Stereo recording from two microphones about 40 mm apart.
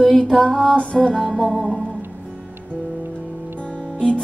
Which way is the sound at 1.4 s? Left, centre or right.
Centre.